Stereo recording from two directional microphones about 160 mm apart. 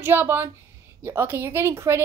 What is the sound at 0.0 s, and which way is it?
A woman's voice, 15° right (ahead or behind).